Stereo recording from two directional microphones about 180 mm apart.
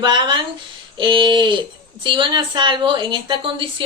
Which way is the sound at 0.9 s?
30° right (ahead or behind).